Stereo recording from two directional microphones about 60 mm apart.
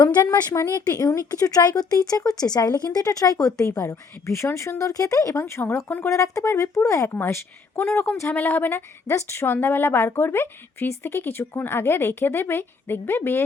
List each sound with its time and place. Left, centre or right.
0.3 s speech: left
0.9 s speech: left
3.8 s speech: left
4.8 s speech: left
5.4 s speech: left
6.1 s speech: left
6.5 s speech: left
7.1 s a woman's voice: left
9.0 s speech: left
9.5 s speech: left